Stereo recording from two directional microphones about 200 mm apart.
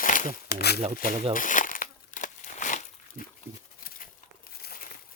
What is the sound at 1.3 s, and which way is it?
Crumpling, 40° left (ahead or behind).